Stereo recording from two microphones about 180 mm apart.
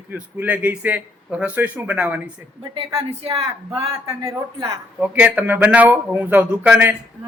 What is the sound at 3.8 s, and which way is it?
A man's voice, 25° right (ahead or behind).